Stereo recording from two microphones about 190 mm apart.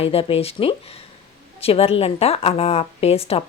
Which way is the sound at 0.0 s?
30° left (ahead or behind).